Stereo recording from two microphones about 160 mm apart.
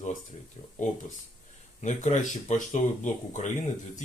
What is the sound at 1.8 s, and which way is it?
Speech, 50° left (ahead or behind).